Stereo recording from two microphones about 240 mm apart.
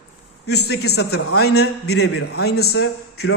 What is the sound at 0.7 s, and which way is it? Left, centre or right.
A woman's voice, left.